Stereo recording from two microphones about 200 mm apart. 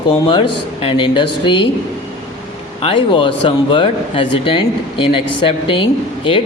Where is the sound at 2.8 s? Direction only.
25° left (ahead or behind).